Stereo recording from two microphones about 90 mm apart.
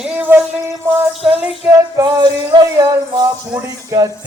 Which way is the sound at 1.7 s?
50° right (ahead or behind).